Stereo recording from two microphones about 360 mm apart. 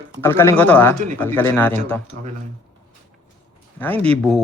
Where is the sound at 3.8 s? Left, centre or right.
Centre.